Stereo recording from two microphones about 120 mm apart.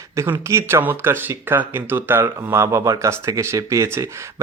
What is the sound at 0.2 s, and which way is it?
Speech, 25° right (ahead or behind).